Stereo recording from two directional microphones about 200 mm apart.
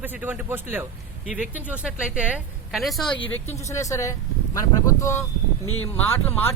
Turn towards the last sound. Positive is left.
turn(degrees=10)  # may be behind; listen again after turning